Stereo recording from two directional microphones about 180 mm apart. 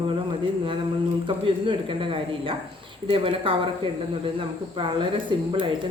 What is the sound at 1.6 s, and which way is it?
Speech, 30° right (ahead or behind).